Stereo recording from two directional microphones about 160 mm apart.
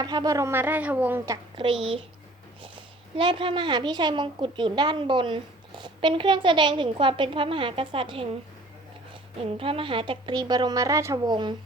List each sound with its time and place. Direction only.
0.0 s a woman's voice: 25° right (ahead or behind)
1.5 s a woman's voice: 30° right (ahead or behind)
3.2 s a woman's voice: 30° right (ahead or behind)
9.4 s a woman's voice: 35° right (ahead or behind)